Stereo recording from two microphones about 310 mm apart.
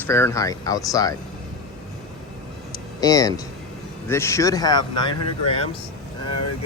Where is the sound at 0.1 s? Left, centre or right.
Centre.